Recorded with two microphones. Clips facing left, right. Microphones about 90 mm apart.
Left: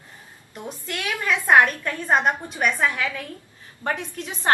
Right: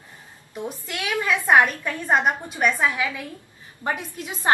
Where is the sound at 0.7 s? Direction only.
10° right (ahead or behind).